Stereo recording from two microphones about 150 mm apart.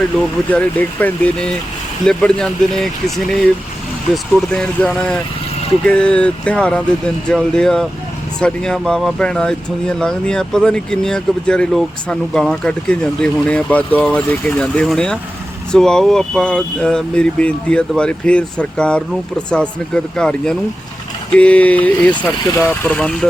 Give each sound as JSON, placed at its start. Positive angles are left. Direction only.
{"t": 0.2, "sound": "speech", "side_deg": 10}
{"t": 4.1, "sound": "speech", "side_deg": 5}